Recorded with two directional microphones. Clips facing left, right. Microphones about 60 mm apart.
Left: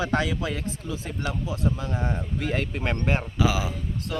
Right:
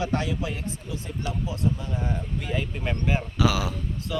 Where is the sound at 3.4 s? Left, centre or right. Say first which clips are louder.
Right 2 dB; left.